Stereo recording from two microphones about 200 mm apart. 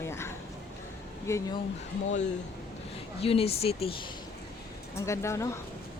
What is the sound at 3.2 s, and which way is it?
Speech, 30° left (ahead or behind).